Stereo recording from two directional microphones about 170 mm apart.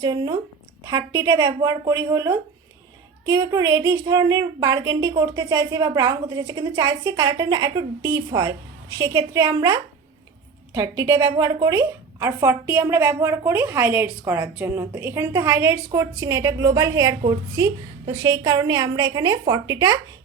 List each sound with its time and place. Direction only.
0.0 s a woman's voice: 25° right (ahead or behind)
10.8 s a woman's voice: 20° right (ahead or behind)